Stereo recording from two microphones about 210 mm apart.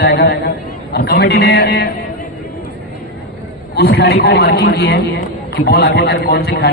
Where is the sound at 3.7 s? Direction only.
50° left (ahead or behind).